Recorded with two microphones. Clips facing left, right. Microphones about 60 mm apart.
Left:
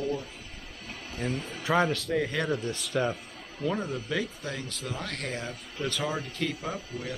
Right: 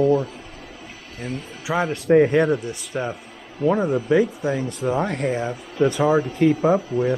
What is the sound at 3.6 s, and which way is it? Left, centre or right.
Speech, right.